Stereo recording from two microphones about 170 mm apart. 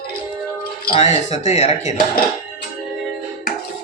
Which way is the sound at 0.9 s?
40° left (ahead or behind).